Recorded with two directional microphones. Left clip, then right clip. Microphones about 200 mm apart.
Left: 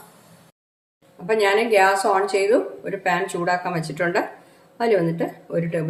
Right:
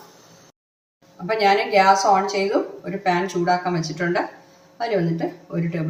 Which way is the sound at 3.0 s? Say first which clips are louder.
Right 1 dB; 35° left (ahead or behind).